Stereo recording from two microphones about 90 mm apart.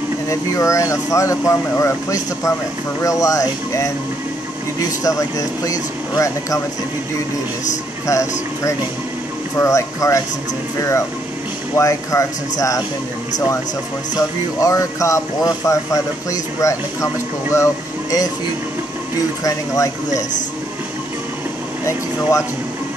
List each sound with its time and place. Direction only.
0.3 s speech: 35° left (ahead or behind)
5.0 s speech: 40° left (ahead or behind)
8.1 s speech: 35° left (ahead or behind)
14.1 s speech: 40° left (ahead or behind)
19.4 s speech: 40° left (ahead or behind)